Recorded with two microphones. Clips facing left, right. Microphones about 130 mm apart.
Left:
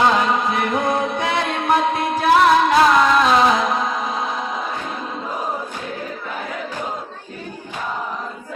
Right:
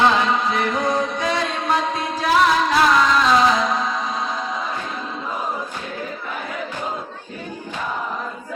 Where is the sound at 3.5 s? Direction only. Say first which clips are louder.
Left 1 dB; 55° left (ahead or behind).